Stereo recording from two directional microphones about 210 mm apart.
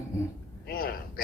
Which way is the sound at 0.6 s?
45° left (ahead or behind).